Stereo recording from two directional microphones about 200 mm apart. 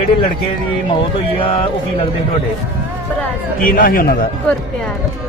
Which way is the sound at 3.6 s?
45° left (ahead or behind).